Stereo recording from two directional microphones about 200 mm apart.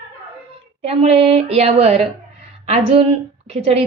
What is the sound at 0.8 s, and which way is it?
A woman's voice, 30° right (ahead or behind).